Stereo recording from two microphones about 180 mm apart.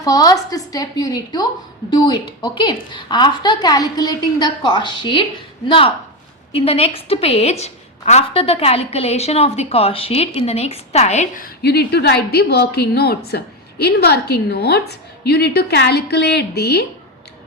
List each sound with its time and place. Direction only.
0.0 s a woman's voice: 20° left (ahead or behind); by 16.8 s 65° left (ahead or behind)